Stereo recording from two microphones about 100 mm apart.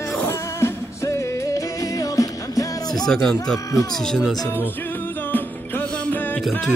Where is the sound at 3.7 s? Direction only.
35° left (ahead or behind).